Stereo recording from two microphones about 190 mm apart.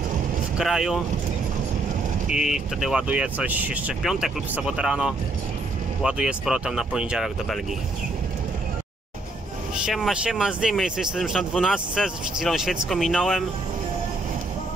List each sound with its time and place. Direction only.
0.6 s speech: 5° right (ahead or behind)
2.2 s speech: 5° right (ahead or behind)
9.8 s speech: centre (ahead or behind)